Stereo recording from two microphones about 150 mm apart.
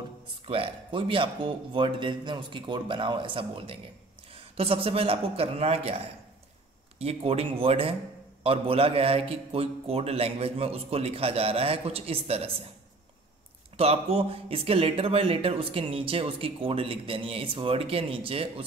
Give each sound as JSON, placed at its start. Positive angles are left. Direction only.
{"t": 0.5, "sound": "speech", "side_deg": -35}
{"t": 13.7, "sound": "speech", "side_deg": -40}